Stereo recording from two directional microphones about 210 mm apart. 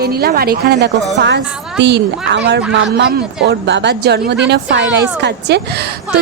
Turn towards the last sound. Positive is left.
turn(degrees=-50)  # may be behind; listen again after turning